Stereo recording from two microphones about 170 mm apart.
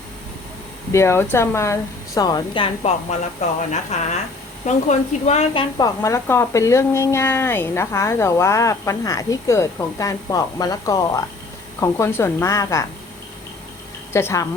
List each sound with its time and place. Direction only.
0.9 s a woman's voice: 15° left (ahead or behind); by 5.6 s 40° left (ahead or behind)
5.7 s speech: 20° left (ahead or behind)
14.1 s speech: 15° left (ahead or behind)